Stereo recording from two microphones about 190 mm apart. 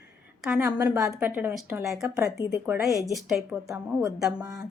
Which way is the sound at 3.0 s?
Centre (ahead or behind).